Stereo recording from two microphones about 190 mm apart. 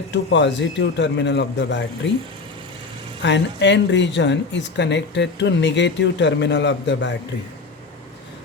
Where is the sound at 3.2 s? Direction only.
70° left (ahead or behind).